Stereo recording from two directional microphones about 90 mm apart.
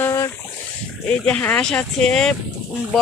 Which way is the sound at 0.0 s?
30° left (ahead or behind).